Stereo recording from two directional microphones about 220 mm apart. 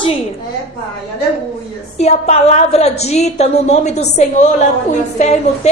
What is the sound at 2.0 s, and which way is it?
A woman's voice, 30° left (ahead or behind).